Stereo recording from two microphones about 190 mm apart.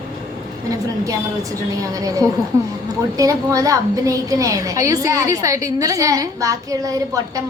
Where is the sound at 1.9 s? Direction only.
20° right (ahead or behind).